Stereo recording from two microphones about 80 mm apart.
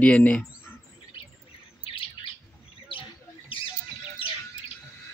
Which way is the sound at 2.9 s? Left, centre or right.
Left.